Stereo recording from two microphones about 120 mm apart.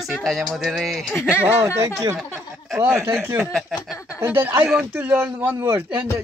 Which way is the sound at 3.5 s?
Centre (ahead or behind).